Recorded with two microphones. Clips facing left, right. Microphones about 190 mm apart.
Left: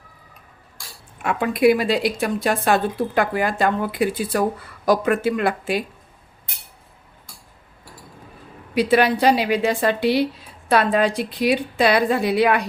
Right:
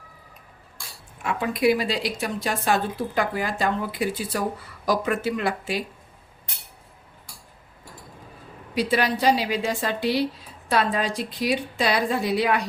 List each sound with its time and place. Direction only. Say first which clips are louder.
1.2 s a woman's voice: left 5 dB; 55° left (ahead or behind)
8.7 s a woman's voice: left 6 dB; 60° left (ahead or behind)